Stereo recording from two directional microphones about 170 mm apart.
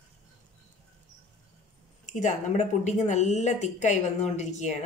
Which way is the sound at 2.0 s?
45° left (ahead or behind).